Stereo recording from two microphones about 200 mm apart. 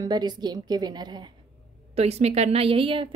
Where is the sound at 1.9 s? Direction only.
30° right (ahead or behind).